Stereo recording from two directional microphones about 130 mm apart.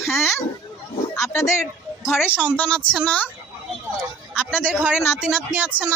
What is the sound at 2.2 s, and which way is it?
Speech, 15° left (ahead or behind).